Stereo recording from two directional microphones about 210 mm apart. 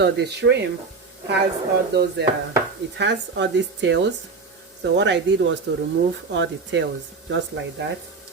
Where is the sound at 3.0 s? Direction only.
55° right (ahead or behind).